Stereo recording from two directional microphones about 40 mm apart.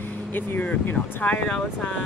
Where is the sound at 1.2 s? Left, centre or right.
Left.